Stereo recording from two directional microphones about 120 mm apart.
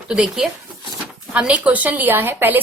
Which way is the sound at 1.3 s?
10° right (ahead or behind).